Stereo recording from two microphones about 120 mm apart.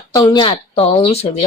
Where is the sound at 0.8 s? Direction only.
55° left (ahead or behind).